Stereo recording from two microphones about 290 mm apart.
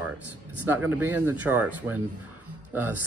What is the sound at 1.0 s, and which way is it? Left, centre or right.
Speech, centre.